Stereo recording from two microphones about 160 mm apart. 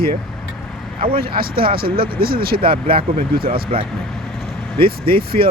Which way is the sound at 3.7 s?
35° right (ahead or behind).